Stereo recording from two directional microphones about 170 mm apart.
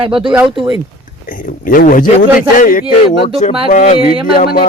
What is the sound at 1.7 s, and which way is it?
Speech, 55° left (ahead or behind).